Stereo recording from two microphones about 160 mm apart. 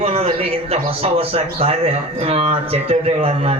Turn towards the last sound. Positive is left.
turn(degrees=-40)  # may be behind; listen again after turning